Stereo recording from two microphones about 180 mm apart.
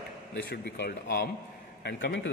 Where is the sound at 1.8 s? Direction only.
70° left (ahead or behind).